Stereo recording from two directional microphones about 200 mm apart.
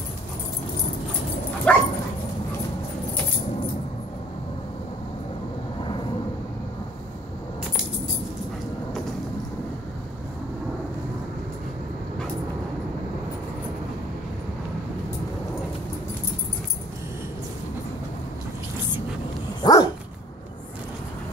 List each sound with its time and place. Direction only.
1.7 s dog: 5° left (ahead or behind)
19.6 s dog: 20° left (ahead or behind)